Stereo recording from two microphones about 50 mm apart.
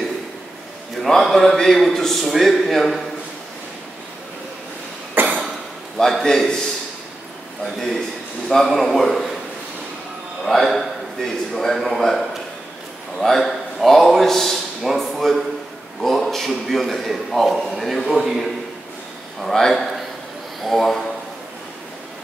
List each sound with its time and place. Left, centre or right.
1.0 s a man's voice: centre
5.1 s cough: right
5.9 s a man's voice: centre
7.6 s a man's voice: centre
10.4 s a man's voice: centre
19.4 s a man's voice: centre